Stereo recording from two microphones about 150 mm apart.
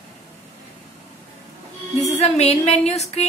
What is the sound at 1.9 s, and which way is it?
A woman's voice, 45° left (ahead or behind).